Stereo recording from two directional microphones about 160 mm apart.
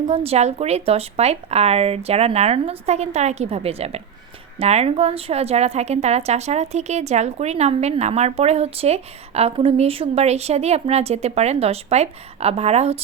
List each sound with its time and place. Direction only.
0.1 s a woman's voice: 40° right (ahead or behind)